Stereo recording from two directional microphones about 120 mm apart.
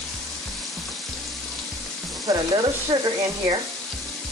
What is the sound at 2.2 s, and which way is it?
Speech, 40° right (ahead or behind).